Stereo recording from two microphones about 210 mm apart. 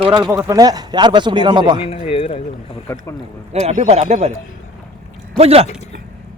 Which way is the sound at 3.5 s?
30° right (ahead or behind).